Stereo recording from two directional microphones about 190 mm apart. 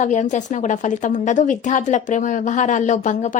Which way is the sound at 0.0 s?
40° left (ahead or behind).